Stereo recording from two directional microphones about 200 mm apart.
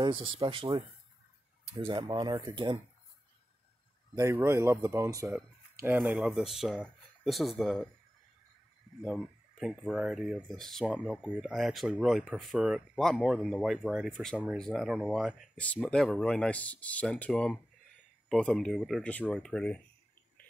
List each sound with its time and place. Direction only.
0.0 s speech: 25° right (ahead or behind)
4.1 s speech: 15° right (ahead or behind)
9.0 s speech: centre (ahead or behind)